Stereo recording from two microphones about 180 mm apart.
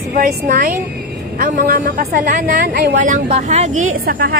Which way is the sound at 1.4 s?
50° right (ahead or behind).